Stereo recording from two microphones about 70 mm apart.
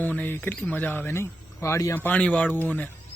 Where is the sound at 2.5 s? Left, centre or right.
Left.